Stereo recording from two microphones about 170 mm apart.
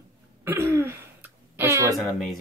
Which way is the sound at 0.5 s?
15° right (ahead or behind).